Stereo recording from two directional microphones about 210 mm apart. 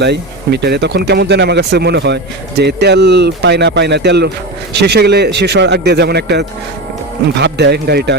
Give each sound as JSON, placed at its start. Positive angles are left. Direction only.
{"t": 0.0, "sound": "speech", "side_deg": -55}